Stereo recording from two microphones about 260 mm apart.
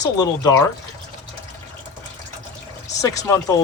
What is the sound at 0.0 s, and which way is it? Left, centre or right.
Speech, centre.